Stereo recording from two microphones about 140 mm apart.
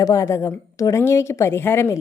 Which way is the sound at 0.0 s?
20° left (ahead or behind).